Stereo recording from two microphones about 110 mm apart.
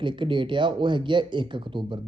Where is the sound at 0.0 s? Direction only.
45° right (ahead or behind).